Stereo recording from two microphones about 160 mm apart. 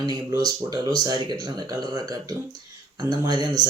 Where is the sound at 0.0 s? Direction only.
25° right (ahead or behind).